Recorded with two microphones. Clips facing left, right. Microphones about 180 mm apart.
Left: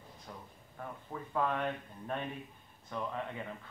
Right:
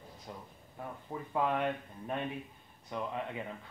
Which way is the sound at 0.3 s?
20° right (ahead or behind).